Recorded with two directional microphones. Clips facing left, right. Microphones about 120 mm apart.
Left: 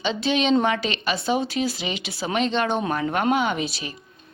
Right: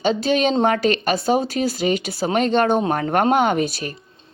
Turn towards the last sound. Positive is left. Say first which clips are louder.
# right 6 dB
turn(degrees=-50)  # may be behind; listen again after turning